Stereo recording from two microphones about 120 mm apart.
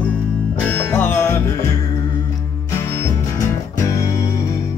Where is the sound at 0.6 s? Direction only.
15° left (ahead or behind).